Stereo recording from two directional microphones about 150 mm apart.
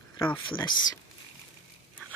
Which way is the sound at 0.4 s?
30° left (ahead or behind).